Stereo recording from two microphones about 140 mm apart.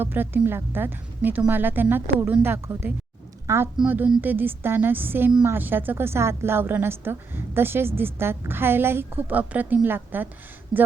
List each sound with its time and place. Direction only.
0.0 s a woman's voice: 15° right (ahead or behind)